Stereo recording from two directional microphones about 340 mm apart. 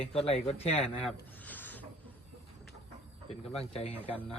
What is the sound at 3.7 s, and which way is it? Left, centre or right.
Speech, centre.